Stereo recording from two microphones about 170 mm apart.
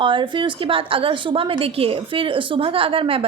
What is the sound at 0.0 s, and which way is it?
A woman's voice, 30° right (ahead or behind).